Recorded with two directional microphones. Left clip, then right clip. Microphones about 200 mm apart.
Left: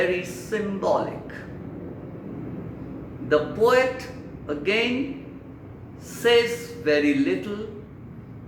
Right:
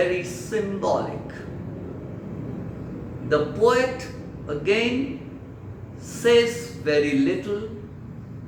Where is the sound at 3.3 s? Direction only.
20° left (ahead or behind).